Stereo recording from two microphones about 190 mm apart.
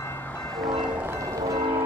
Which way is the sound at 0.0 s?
10° left (ahead or behind).